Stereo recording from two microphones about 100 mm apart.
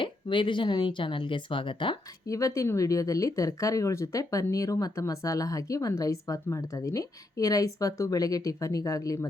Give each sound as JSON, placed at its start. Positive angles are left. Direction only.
{"t": 0.0, "sound": "speech", "side_deg": 55}
{"t": 2.2, "sound": "a woman's voice", "side_deg": 35}